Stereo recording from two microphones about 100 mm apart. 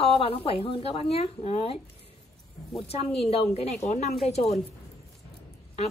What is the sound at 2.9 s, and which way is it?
A woman's voice, 90° left.